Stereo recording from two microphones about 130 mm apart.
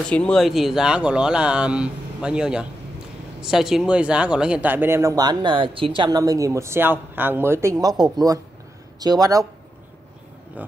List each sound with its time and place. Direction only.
0.1 s speech: 5° left (ahead or behind); by 5.1 s 20° right (ahead or behind)
5.1 s speech: 30° right (ahead or behind)